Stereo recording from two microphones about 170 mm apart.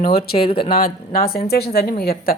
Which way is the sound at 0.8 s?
60° left (ahead or behind).